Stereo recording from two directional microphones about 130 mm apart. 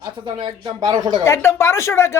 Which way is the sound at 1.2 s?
20° left (ahead or behind).